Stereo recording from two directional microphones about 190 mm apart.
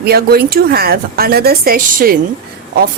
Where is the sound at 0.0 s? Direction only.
55° right (ahead or behind).